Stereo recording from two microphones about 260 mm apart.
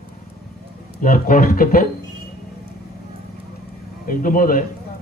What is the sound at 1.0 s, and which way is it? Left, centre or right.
Speech, left.